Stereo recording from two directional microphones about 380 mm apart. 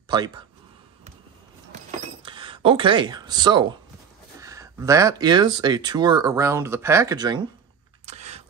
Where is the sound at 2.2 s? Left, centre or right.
Centre.